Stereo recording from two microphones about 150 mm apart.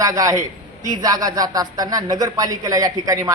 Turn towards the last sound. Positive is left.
turn(degrees=-20)  # may be behind; listen again after turning